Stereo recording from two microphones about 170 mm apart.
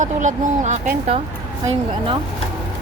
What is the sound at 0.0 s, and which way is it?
Speech, 45° right (ahead or behind).